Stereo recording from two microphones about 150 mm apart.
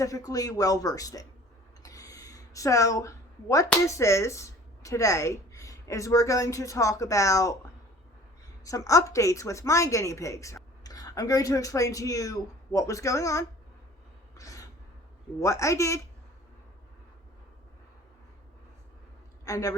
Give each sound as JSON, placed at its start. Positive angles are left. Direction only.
{"t": 0.0, "sound": "a woman's voice", "side_deg": 20}
{"t": 1.8, "sound": "a sound", "side_deg": 20}
{"t": 3.8, "sound": "a woman's voice", "side_deg": 20}
{"t": 8.6, "sound": "a woman's voice", "side_deg": 20}
{"t": 14.3, "sound": "a sound", "side_deg": 20}
{"t": 15.4, "sound": "a woman's voice", "side_deg": 20}
{"t": 19.5, "sound": "a woman's voice", "side_deg": 20}